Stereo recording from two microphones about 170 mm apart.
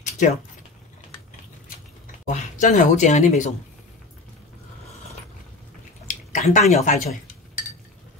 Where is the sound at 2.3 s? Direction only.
50° left (ahead or behind).